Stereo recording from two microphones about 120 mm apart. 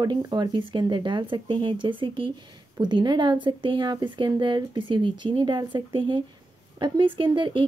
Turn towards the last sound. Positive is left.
turn(degrees=-45)  # may be behind; listen again after turning